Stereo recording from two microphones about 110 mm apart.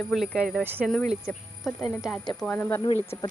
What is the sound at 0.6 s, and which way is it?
Speech, 20° right (ahead or behind).